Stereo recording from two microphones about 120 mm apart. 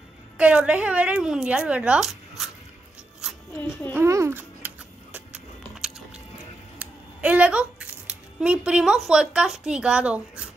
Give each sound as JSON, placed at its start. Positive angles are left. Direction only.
{"t": 0.4, "sound": "a woman's voice", "side_deg": -10}
{"t": 3.6, "sound": "a child's voice", "side_deg": 25}
{"t": 3.9, "sound": "a sound", "side_deg": -25}
{"t": 5.8, "sound": "biting", "side_deg": -5}
{"t": 6.8, "sound": "scissors", "side_deg": -10}
{"t": 8.4, "sound": "a woman's voice", "side_deg": -10}